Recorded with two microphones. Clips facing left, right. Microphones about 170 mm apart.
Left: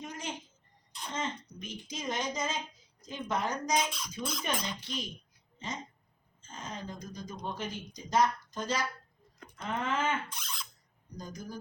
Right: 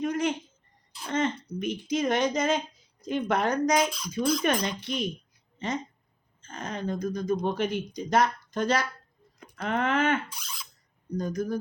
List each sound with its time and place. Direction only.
0.0 s a sound: 65° right (ahead or behind)
1.0 s throat clearing: 65° right (ahead or behind)
1.5 s speech: 65° right (ahead or behind)
3.8 s speech: centre (ahead or behind)
4.6 s speech: 65° right (ahead or behind)
10.3 s a sound: 5° right (ahead or behind)
11.2 s speech: 60° right (ahead or behind)